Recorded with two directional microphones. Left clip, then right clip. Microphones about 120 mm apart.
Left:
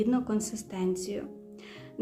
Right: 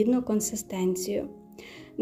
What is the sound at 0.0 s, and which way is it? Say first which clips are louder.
A woman's voice: right 4 dB; 25° right (ahead or behind).